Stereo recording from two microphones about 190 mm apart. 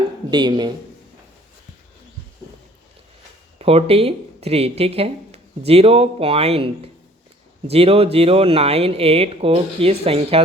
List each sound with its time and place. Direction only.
0.3 s speech: 25° right (ahead or behind)
3.6 s speech: 30° right (ahead or behind)